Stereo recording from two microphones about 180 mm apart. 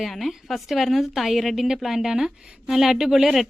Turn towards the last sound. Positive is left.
turn(degrees=0)  # may be behind; listen again after turning